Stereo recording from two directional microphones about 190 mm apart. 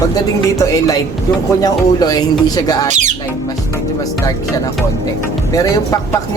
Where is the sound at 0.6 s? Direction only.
20° left (ahead or behind).